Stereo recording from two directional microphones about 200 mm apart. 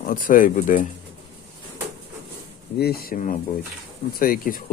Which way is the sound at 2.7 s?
50° left (ahead or behind).